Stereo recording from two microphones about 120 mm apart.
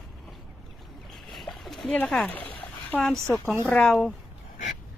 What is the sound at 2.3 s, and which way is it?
Splash, 15° left (ahead or behind).